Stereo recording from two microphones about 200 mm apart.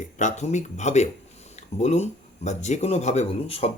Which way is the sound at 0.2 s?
35° left (ahead or behind).